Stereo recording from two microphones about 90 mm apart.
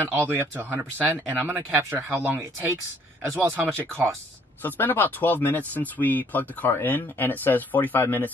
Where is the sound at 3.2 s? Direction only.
35° right (ahead or behind).